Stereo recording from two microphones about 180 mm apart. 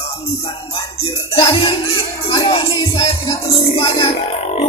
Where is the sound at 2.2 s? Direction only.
30° left (ahead or behind).